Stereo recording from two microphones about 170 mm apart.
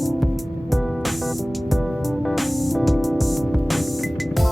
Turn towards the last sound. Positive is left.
turn(degrees=0)  # may be behind; listen again after turning